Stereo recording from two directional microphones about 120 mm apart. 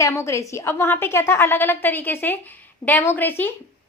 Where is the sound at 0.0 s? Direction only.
25° left (ahead or behind).